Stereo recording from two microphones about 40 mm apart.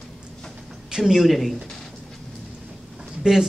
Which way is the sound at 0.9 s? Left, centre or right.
Centre.